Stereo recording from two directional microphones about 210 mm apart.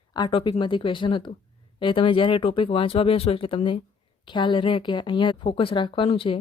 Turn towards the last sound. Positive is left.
turn(degrees=25)  # may be behind; listen again after turning